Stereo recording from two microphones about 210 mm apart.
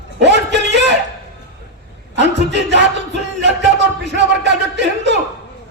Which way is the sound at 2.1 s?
55° right (ahead or behind).